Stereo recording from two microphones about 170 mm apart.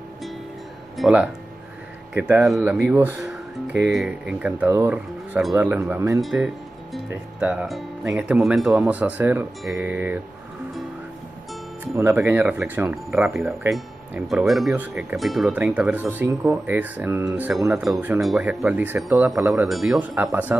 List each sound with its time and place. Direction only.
0.9 s speech: 5° right (ahead or behind)
6.2 s speech: centre (ahead or behind)
11.9 s speech: 15° right (ahead or behind)
17.8 s speech: centre (ahead or behind)
20.2 s speech: 10° right (ahead or behind)